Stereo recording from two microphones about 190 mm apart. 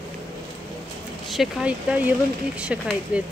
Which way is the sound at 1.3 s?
5° right (ahead or behind).